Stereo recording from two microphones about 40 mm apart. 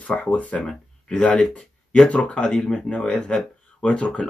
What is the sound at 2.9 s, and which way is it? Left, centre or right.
Speech, left.